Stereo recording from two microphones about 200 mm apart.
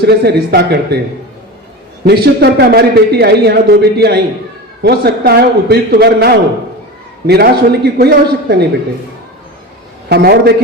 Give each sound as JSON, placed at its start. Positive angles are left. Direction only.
{"t": 0.0, "sound": "a man's voice", "side_deg": -50}
{"t": 2.0, "sound": "a man's voice", "side_deg": -50}
{"t": 10.1, "sound": "a man's voice", "side_deg": -50}